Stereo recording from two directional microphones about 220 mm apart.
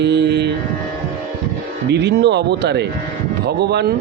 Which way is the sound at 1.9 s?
50° right (ahead or behind).